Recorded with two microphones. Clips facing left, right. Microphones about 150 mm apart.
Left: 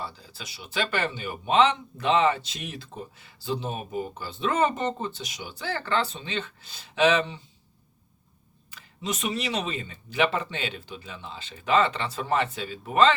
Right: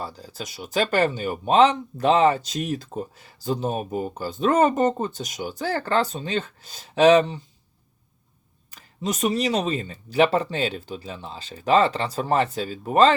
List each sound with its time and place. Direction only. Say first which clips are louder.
0.0 s speech: right 5 dB; 40° right (ahead or behind)
8.7 s speech: right 4 dB; 40° right (ahead or behind)